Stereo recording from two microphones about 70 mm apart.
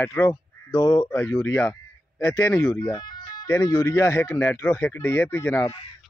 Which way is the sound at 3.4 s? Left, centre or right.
Left.